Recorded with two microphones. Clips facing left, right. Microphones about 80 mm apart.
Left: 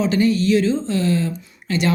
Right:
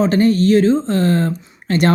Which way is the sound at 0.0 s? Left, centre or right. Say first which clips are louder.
Right 4 dB; right.